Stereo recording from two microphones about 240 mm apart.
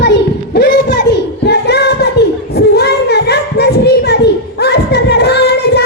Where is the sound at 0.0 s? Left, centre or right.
Left.